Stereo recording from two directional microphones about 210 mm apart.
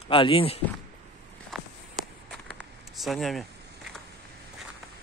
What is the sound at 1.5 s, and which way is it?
Walk, centre (ahead or behind).